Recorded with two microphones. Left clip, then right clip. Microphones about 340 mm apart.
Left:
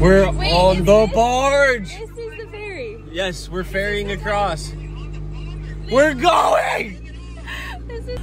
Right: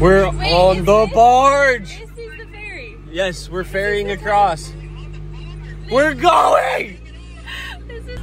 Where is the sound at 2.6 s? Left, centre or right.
Left.